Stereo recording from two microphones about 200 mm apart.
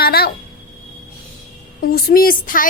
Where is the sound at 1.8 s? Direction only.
45° left (ahead or behind).